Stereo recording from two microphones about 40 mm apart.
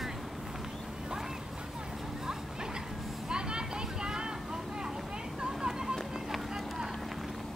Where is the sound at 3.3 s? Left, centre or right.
Right.